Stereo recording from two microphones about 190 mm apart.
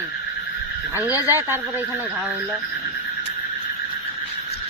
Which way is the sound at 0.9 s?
15° left (ahead or behind).